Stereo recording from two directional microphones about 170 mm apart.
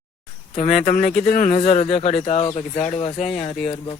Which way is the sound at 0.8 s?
50° left (ahead or behind).